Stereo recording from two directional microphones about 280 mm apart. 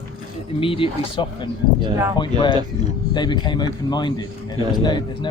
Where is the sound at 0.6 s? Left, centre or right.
Centre.